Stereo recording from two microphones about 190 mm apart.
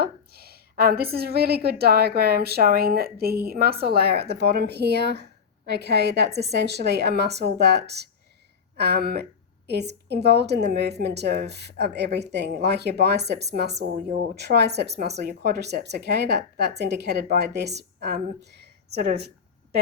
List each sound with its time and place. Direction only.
0.0 s a woman's voice: 55° right (ahead or behind)